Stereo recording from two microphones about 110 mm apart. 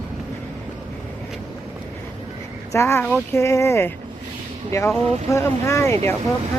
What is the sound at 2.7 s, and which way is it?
Speech, 25° left (ahead or behind).